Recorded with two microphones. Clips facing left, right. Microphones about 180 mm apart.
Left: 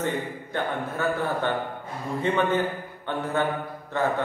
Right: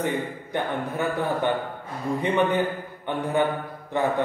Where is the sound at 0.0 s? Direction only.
15° right (ahead or behind).